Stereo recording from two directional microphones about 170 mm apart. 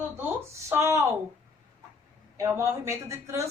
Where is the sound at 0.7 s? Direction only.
15° right (ahead or behind).